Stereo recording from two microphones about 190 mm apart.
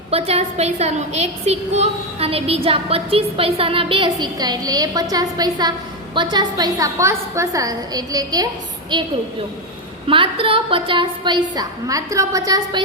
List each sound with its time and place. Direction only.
0.1 s a woman's voice: 35° right (ahead or behind)
10.1 s a woman's voice: 25° right (ahead or behind)